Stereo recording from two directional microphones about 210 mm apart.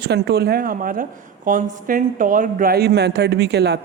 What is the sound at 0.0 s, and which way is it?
Speech, 50° right (ahead or behind).